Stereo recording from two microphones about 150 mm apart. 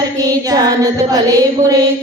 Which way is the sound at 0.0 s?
25° right (ahead or behind).